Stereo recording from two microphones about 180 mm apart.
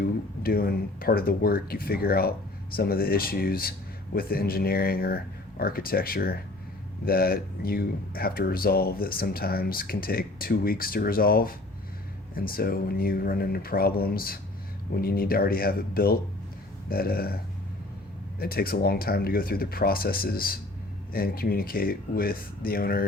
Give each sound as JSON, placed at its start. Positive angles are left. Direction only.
{"t": 0.0, "sound": "speech", "side_deg": 55}
{"t": 18.3, "sound": "speech", "side_deg": 55}